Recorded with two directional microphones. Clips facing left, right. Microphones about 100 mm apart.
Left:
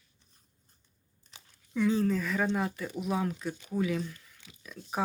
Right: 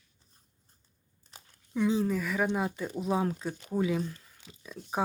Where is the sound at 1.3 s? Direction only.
40° right (ahead or behind).